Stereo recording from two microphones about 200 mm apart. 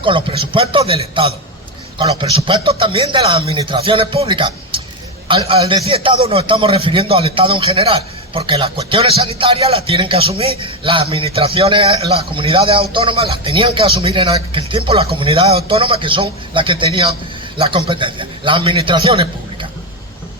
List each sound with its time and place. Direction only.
0.0 s speech: 25° right (ahead or behind)